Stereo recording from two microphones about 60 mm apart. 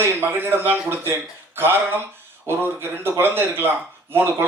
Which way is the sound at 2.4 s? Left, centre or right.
Right.